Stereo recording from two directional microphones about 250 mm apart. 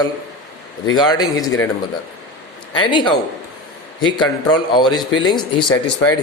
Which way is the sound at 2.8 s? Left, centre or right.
Centre.